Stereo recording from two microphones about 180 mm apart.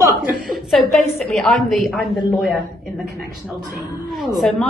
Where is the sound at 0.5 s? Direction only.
Centre (ahead or behind).